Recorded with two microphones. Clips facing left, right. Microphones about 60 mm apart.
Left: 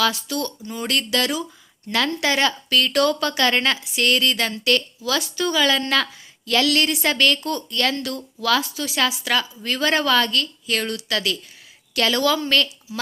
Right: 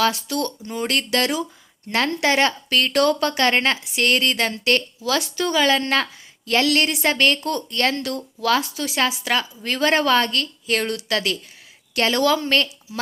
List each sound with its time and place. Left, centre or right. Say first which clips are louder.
0.0 s a woman's voice: right 1 dB; right
7.4 s a woman's voice: right 1 dB; right
9.0 s a woman's voice: even; right